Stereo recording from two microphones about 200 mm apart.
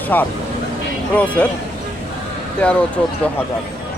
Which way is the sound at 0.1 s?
10° left (ahead or behind).